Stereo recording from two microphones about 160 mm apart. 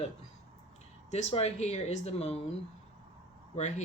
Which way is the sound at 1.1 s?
45° left (ahead or behind).